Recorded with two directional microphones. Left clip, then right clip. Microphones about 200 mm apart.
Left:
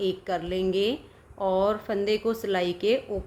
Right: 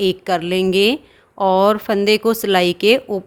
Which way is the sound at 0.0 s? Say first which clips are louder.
Right 10 dB; 50° right (ahead or behind).